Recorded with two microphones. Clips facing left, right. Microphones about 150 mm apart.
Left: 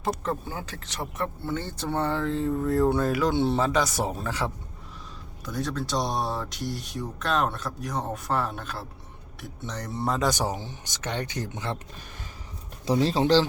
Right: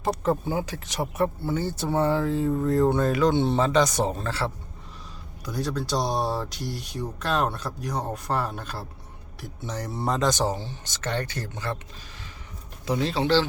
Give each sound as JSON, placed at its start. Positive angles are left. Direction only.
{"t": 0.0, "sound": "speech", "side_deg": -5}
{"t": 5.5, "sound": "speech", "side_deg": 0}
{"t": 12.8, "sound": "speech", "side_deg": 35}